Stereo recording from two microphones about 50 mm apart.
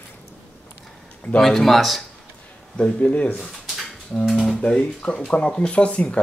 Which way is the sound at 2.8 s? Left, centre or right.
Left.